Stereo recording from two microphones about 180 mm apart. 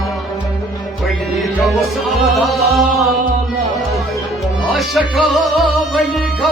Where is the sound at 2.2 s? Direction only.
Centre (ahead or behind).